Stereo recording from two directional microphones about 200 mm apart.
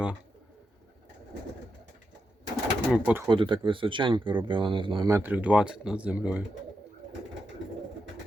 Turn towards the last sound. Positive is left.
turn(degrees=-5)  # may be behind; listen again after turning